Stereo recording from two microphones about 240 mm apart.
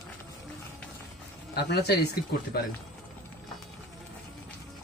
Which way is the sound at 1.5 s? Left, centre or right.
Left.